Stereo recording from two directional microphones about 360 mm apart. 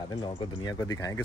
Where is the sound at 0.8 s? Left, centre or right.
Centre.